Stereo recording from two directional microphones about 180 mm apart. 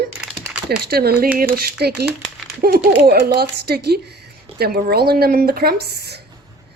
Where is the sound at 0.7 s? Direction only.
60° right (ahead or behind).